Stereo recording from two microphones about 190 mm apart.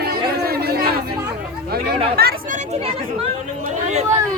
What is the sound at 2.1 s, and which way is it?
Chatter, 50° right (ahead or behind).